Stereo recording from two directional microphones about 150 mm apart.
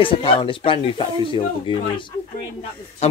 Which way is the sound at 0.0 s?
35° left (ahead or behind).